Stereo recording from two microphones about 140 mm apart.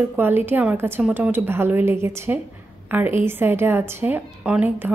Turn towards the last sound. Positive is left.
turn(degrees=-10)  # may be behind; listen again after turning